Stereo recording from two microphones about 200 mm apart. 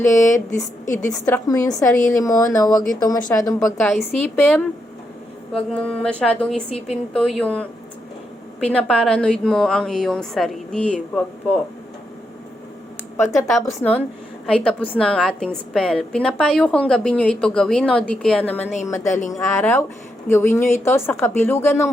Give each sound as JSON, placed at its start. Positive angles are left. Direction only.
{"t": 0.0, "sound": "speech", "side_deg": 15}
{"t": 3.8, "sound": "speech", "side_deg": 5}
{"t": 5.7, "sound": "a woman's voice", "side_deg": 5}
{"t": 6.7, "sound": "speech", "side_deg": 30}
{"t": 7.1, "sound": "a woman's voice", "side_deg": 5}
{"t": 13.6, "sound": "a woman's voice", "side_deg": 10}